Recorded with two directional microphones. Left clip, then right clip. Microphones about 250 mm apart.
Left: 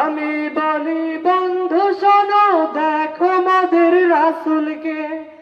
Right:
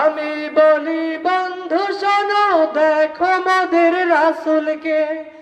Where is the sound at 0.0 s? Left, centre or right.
Right.